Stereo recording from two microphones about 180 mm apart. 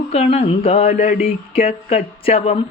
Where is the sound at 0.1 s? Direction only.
35° left (ahead or behind).